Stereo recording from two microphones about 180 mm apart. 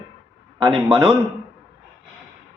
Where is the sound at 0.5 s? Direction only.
25° right (ahead or behind).